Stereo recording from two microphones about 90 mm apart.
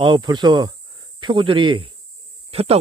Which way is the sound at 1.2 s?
65° right (ahead or behind).